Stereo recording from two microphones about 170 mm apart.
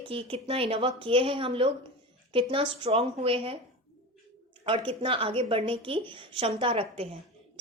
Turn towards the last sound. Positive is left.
turn(degrees=-35)  # may be behind; listen again after turning